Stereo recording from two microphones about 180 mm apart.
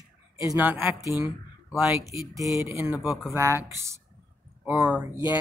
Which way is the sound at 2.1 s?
15° right (ahead or behind).